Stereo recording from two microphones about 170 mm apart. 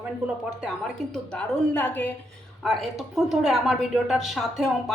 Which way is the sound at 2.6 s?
Centre (ahead or behind).